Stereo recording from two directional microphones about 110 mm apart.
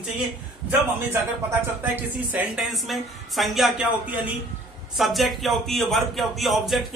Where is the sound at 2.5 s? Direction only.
Centre (ahead or behind).